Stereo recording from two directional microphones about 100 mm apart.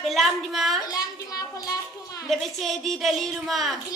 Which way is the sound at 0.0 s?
Centre (ahead or behind).